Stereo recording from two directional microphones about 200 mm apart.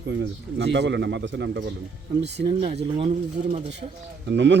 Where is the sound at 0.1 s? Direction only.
60° right (ahead or behind).